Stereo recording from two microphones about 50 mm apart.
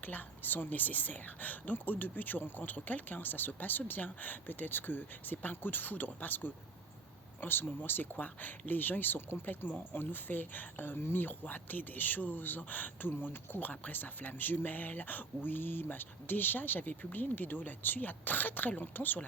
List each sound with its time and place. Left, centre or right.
0.0 s speech: left
9.6 s speech: left